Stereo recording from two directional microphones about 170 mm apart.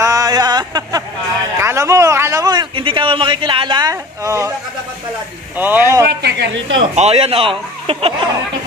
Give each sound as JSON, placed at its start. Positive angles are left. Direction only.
{"t": 0.0, "sound": "a sound", "side_deg": -20}
{"t": 1.6, "sound": "a man's voice", "side_deg": -15}
{"t": 5.6, "sound": "speech", "side_deg": -10}
{"t": 6.0, "sound": "speech", "side_deg": -80}
{"t": 6.8, "sound": "speech", "side_deg": -35}